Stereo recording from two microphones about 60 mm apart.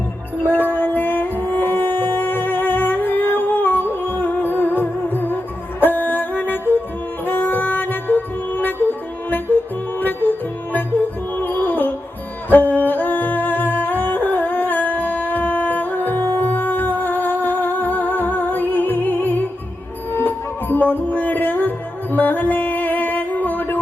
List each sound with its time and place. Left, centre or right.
0.5 s music: left